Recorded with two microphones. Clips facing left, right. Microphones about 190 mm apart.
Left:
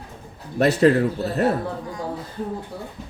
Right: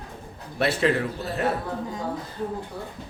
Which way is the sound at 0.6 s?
40° left (ahead or behind).